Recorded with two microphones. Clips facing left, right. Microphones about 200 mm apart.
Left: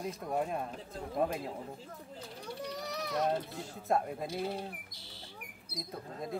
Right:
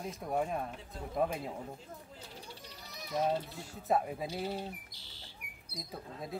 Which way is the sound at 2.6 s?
70° left (ahead or behind).